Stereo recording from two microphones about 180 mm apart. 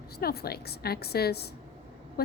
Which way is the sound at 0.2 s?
60° left (ahead or behind).